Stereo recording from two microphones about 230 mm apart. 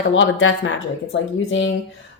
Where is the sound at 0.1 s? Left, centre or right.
Left.